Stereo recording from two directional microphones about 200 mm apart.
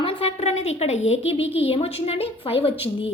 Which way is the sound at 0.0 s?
25° left (ahead or behind).